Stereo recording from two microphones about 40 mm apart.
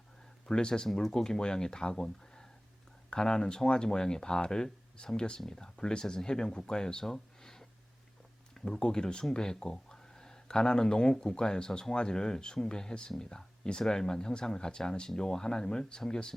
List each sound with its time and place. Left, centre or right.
0.4 s speech: centre
7.0 s a sound: centre
8.5 s speech: centre